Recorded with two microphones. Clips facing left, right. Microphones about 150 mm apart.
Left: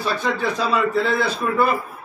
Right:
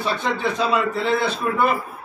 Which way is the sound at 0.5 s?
20° right (ahead or behind).